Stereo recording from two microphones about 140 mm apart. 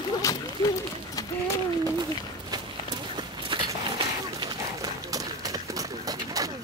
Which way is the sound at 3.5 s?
35° right (ahead or behind).